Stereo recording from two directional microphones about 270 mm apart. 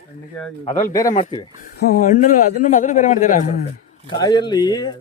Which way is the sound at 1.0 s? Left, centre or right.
Left.